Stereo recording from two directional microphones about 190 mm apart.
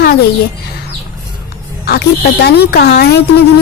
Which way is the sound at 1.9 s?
60° left (ahead or behind).